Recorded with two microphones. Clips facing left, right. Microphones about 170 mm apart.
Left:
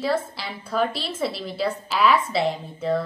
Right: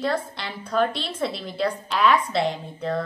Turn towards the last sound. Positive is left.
turn(degrees=0)  # may be behind; listen again after turning